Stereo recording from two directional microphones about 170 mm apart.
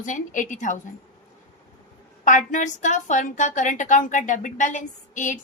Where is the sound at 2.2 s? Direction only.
50° left (ahead or behind).